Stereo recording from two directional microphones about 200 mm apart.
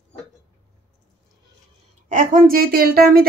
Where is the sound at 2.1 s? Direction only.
40° right (ahead or behind).